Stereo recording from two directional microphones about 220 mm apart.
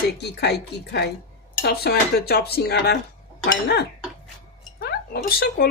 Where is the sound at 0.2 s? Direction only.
50° left (ahead or behind).